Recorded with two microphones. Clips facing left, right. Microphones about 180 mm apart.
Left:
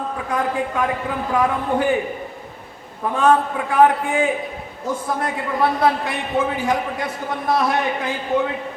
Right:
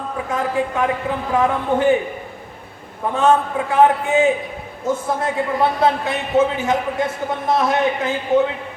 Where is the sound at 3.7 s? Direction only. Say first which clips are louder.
Right 1 dB; 25° right (ahead or behind).